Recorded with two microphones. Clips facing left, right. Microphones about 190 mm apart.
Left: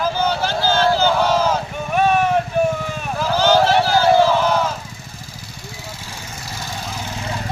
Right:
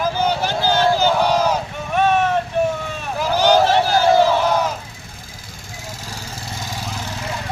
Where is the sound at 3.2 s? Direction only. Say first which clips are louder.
Right 1 dB; 15° right (ahead or behind).